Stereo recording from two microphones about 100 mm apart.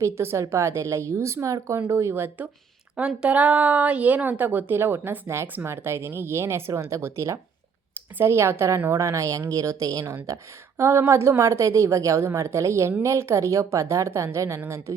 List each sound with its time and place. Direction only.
0.0 s a woman's voice: 25° right (ahead or behind)
2.9 s a woman's voice: 10° right (ahead or behind); by 14.9 s 30° right (ahead or behind)